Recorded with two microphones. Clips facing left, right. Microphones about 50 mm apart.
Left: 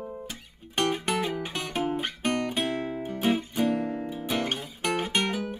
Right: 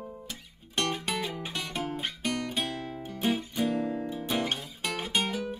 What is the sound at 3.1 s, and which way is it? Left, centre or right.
Music, left.